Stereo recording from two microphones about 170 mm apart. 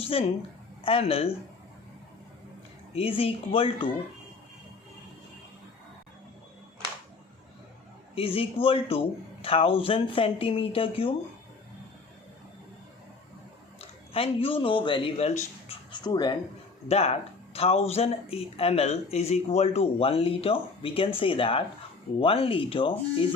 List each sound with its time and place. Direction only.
0.0 s a woman's voice: 35° left (ahead or behind)
2.9 s speech: 35° left (ahead or behind)
8.1 s speech: 35° left (ahead or behind)
13.7 s speech: 35° left (ahead or behind)
16.9 s speech: 35° left (ahead or behind)